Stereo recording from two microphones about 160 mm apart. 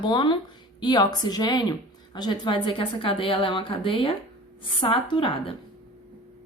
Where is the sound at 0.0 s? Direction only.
30° left (ahead or behind).